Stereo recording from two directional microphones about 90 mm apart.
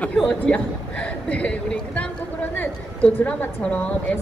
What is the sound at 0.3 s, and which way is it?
A woman's voice, 15° left (ahead or behind).